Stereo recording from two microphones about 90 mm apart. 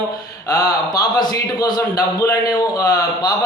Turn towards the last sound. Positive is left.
turn(degrees=45)  # may be behind; listen again after turning